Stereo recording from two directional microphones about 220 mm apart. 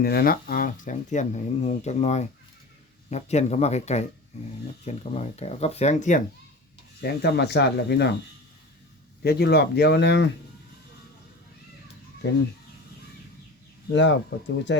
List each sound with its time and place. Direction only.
0.0 s speech: 45° left (ahead or behind)
7.0 s speech: 50° left (ahead or behind)
9.2 s speech: 45° left (ahead or behind)
13.9 s speech: 55° left (ahead or behind)